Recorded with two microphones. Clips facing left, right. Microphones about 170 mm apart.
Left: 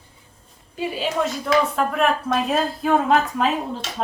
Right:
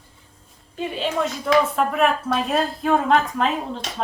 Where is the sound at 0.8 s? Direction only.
5° left (ahead or behind).